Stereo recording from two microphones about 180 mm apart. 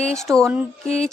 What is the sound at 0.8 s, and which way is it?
Music, 35° left (ahead or behind).